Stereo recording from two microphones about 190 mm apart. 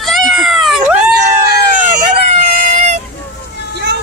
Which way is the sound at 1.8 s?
50° right (ahead or behind).